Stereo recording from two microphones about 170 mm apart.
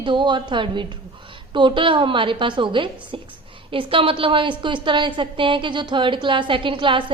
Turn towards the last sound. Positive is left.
turn(degrees=-30)  # may be behind; listen again after turning